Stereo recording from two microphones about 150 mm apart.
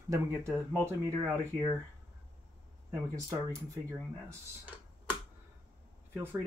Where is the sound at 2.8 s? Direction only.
20° right (ahead or behind).